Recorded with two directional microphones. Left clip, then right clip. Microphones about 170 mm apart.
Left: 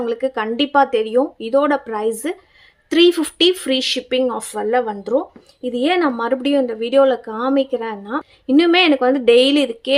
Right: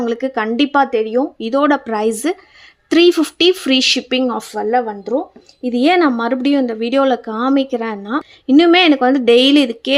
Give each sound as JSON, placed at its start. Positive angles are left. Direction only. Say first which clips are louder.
{"t": 0.0, "sound": "speech", "louder": "right 2 dB", "side_deg": -20}
{"t": 1.4, "sound": "speech", "louder": "right 2 dB", "side_deg": -15}
{"t": 4.5, "sound": "speech", "louder": "right 3 dB", "side_deg": -10}
{"t": 5.6, "sound": "speech", "louder": "right 4 dB", "side_deg": -20}